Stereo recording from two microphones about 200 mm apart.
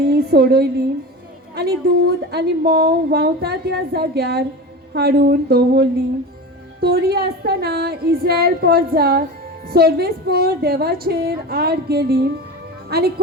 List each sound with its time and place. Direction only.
0.0 s a woman's voice: 50° right (ahead or behind)